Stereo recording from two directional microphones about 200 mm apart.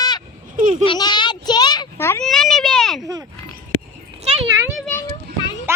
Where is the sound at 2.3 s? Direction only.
Centre (ahead or behind).